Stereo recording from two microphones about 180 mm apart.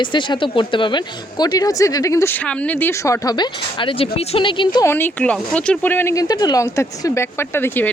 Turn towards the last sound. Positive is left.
turn(degrees=10)  # may be behind; listen again after turning